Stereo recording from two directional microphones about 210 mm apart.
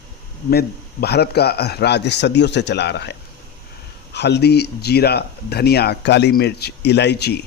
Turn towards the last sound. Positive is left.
turn(degrees=50)  # may be behind; listen again after turning